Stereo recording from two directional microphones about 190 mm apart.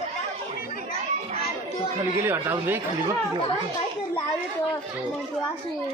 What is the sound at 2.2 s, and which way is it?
Speech, 10° right (ahead or behind).